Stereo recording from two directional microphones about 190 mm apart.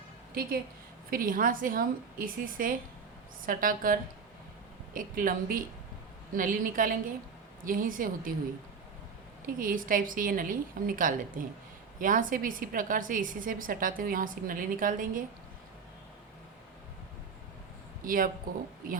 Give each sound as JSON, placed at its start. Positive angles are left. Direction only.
{"t": 1.1, "sound": "a woman's voice", "side_deg": -45}
{"t": 9.6, "sound": "a woman's voice", "side_deg": -45}
{"t": 18.0, "sound": "a woman's voice", "side_deg": -45}